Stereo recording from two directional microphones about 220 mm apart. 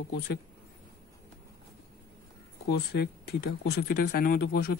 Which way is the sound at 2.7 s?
45° left (ahead or behind).